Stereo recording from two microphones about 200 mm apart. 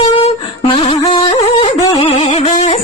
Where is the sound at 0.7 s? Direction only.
30° left (ahead or behind).